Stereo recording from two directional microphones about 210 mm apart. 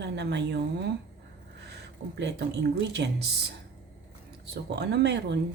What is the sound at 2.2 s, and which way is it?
Speech, 55° right (ahead or behind).